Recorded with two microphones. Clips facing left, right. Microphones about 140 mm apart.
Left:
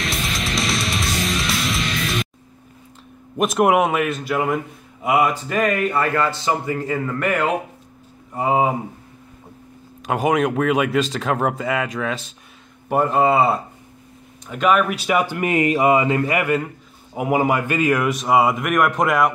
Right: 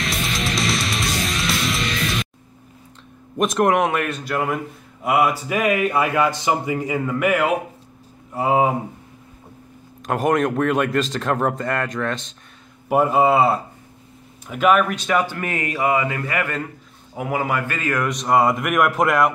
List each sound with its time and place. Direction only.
0.0 s music: centre (ahead or behind)
3.3 s a man's voice: 5° left (ahead or behind)
10.0 s speech: centre (ahead or behind)
12.8 s speech: 5° right (ahead or behind)